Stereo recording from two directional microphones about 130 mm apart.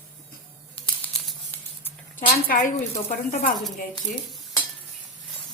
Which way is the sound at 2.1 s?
90° left.